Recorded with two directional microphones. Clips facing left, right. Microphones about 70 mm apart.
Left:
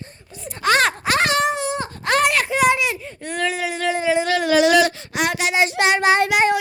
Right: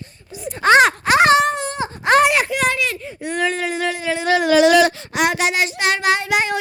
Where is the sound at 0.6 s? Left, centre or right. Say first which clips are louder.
Right 6 dB; right.